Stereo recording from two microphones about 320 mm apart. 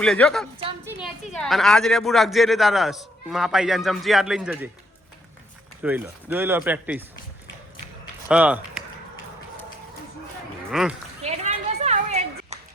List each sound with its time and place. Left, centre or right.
0.0 s a man's voice: centre
5.8 s a man's voice: centre
8.3 s a man's voice: centre
10.7 s a man's voice: centre
11.2 s a sound: centre